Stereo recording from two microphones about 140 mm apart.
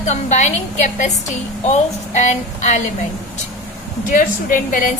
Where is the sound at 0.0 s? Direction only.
55° left (ahead or behind).